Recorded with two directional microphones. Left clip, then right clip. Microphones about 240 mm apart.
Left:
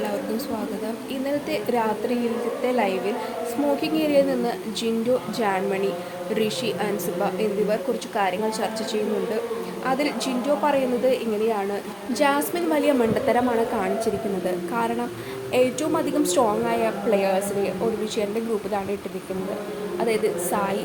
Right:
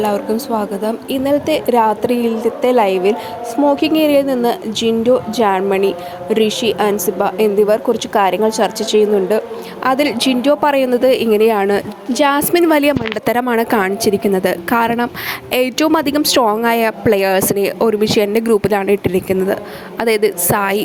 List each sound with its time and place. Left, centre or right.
0.0 s a woman's voice: right
20.0 s a woman's voice: right